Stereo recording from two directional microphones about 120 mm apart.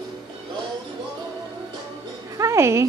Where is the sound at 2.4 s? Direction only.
25° right (ahead or behind).